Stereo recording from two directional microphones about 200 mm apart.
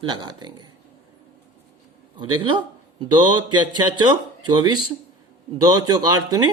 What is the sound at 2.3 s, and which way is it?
Speech, 25° right (ahead or behind).